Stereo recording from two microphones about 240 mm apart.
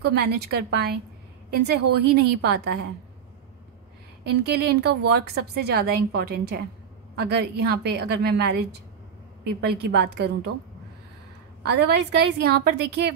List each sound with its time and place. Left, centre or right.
0.0 s a woman's voice: right
4.2 s a woman's voice: right
11.6 s a woman's voice: right